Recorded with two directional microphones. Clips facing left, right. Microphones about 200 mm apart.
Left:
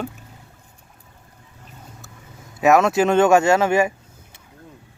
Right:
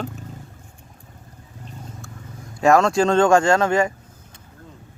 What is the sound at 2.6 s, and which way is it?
Speech, 5° left (ahead or behind).